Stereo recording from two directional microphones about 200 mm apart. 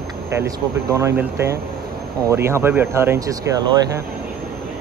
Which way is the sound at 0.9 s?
15° right (ahead or behind).